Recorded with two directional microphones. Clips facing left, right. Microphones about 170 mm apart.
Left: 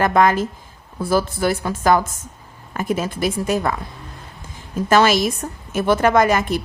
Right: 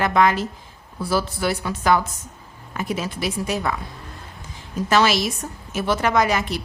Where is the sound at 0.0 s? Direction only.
50° left (ahead or behind).